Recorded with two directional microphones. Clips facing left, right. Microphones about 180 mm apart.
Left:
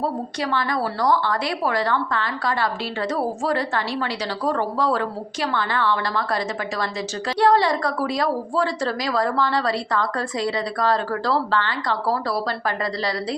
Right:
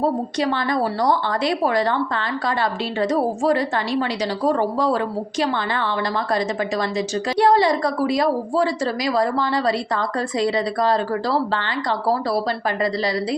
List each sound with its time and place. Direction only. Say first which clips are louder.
0.3 s a woman's voice: right 3 dB; 20° right (ahead or behind)